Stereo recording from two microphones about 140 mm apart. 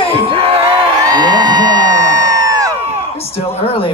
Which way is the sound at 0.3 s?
40° right (ahead or behind).